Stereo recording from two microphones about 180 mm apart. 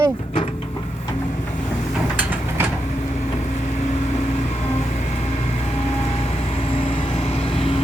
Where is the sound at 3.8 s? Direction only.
40° left (ahead or behind).